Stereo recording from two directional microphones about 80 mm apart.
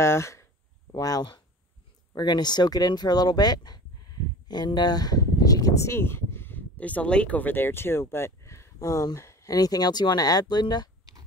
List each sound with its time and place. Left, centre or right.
0.0 s speech: left
0.9 s speech: left